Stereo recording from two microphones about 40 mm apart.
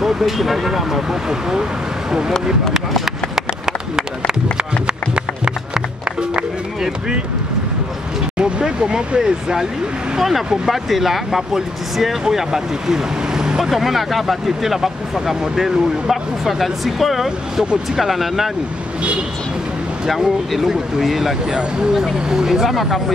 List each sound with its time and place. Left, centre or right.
0.0 s speech: centre
1.5 s speech: centre
3.1 s a sound: centre
4.8 s music: right
8.4 s vehicle: right
9.2 s speech: centre
20.1 s speech: centre